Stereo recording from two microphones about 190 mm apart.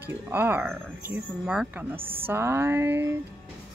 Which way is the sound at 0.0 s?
10° right (ahead or behind).